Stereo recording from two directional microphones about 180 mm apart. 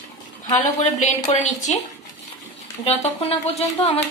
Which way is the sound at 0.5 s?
40° left (ahead or behind).